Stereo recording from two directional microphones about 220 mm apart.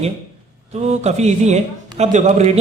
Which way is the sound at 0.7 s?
30° right (ahead or behind).